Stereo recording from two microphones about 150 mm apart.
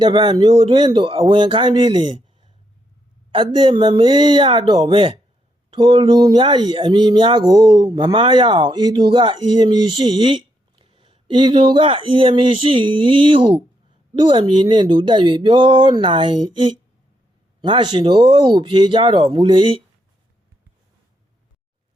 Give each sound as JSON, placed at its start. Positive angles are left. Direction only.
{"t": 0.0, "sound": "speech", "side_deg": -30}